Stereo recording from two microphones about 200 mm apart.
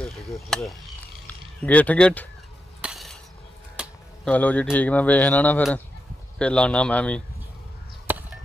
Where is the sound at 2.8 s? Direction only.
Centre (ahead or behind).